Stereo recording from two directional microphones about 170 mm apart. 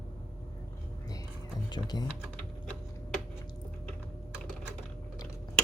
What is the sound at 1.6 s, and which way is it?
Speech, 25° left (ahead or behind).